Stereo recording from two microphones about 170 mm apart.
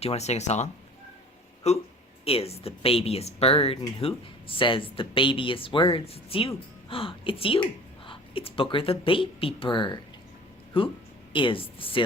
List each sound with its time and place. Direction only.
0.0 s speech: 40° left (ahead or behind)